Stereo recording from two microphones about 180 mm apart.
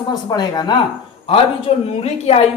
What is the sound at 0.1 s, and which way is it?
Speech, 20° left (ahead or behind).